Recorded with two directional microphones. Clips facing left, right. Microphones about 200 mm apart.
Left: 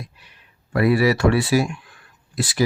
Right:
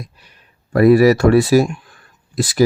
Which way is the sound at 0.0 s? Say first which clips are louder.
Right 3 dB; 40° right (ahead or behind).